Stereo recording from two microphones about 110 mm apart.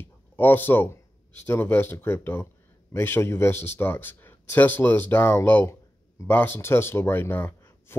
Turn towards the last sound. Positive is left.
turn(degrees=20)  # may be behind; listen again after turning